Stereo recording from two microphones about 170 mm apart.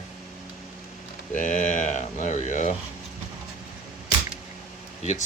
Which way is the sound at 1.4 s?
50° left (ahead or behind).